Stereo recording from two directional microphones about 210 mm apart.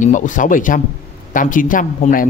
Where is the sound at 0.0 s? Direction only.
35° left (ahead or behind).